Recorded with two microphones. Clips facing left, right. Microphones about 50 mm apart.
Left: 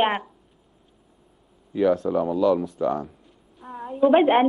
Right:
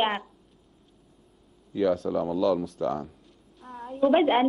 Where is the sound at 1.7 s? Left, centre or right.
Centre.